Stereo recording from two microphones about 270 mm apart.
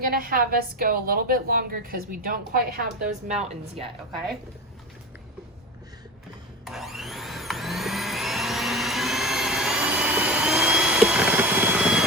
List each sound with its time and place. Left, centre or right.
0.0 s a woman's voice: right
6.7 s vacuum cleaner: centre